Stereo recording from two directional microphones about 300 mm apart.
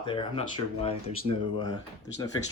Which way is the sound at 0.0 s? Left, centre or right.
Centre.